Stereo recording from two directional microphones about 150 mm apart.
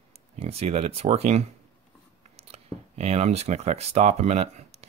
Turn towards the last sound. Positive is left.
turn(degrees=-45)  # may be behind; listen again after turning